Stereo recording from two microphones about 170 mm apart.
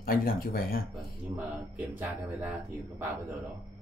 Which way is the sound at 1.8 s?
10° right (ahead or behind).